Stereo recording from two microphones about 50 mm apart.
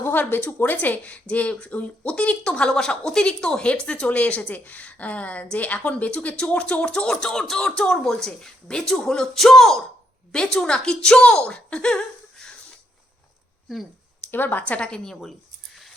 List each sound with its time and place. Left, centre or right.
0.0 s speech: left; by 12.0 s centre
14.3 s speech: left
14.6 s a woman's voice: left; by 15.9 s centre